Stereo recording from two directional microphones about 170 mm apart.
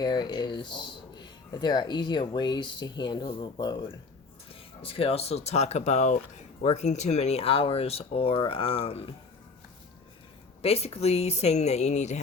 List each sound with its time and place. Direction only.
0.0 s speech: 25° left (ahead or behind)
10.6 s speech: 35° left (ahead or behind)